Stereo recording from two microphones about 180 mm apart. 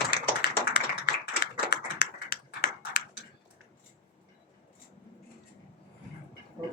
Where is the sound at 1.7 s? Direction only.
60° left (ahead or behind).